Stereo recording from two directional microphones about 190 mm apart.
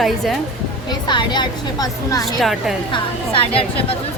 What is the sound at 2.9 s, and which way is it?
A woman's voice, 30° left (ahead or behind).